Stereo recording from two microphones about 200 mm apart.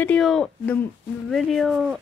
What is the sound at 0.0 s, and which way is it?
Speech, 5° left (ahead or behind).